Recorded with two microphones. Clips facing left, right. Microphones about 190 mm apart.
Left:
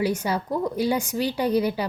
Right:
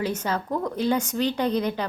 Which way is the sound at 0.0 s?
10° left (ahead or behind).